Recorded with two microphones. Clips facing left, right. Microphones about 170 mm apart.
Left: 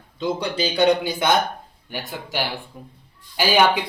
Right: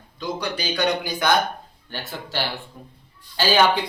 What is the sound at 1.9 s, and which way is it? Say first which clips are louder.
A man's voice: left 2 dB; 15° left (ahead or behind).